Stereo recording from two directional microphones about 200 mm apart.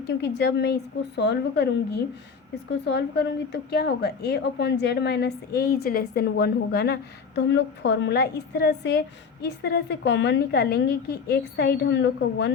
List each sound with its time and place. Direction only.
0.1 s a woman's voice: 55° left (ahead or behind)